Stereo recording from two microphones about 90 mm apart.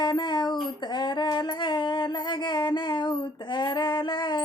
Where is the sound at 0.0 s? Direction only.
55° left (ahead or behind).